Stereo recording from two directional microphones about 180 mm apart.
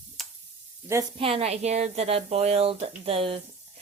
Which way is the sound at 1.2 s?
35° right (ahead or behind).